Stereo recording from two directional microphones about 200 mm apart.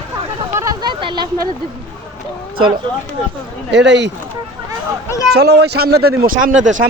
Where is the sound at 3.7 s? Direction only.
60° right (ahead or behind).